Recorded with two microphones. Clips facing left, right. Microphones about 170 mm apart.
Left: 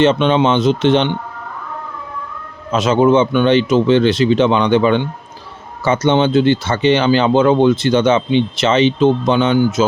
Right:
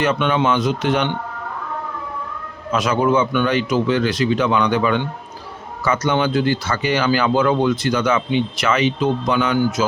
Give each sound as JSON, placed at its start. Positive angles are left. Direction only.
{"t": 0.0, "sound": "speech", "side_deg": 25}
{"t": 2.7, "sound": "speech", "side_deg": 25}